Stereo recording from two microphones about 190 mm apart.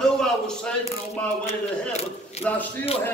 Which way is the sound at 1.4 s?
35° left (ahead or behind).